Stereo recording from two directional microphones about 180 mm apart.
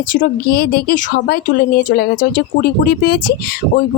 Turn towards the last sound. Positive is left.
turn(degrees=60)  # may be behind; listen again after turning